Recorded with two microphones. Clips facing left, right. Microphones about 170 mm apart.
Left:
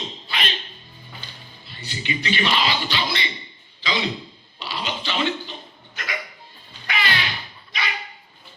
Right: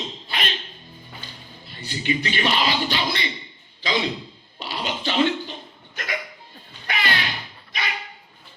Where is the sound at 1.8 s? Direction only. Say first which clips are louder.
Right 2 dB; 50° right (ahead or behind).